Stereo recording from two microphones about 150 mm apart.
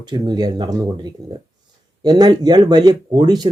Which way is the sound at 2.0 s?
25° right (ahead or behind).